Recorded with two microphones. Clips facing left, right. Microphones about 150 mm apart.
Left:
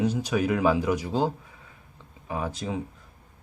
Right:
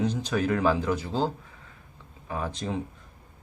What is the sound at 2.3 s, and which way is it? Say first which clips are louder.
Speech: left 1 dB; 10° left (ahead or behind).